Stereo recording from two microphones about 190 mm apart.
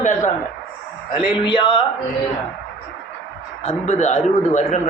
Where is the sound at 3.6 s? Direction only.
40° left (ahead or behind).